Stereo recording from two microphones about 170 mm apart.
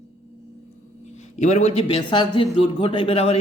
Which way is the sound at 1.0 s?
40° left (ahead or behind).